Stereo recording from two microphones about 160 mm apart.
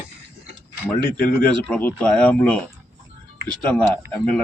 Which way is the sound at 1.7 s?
10° left (ahead or behind).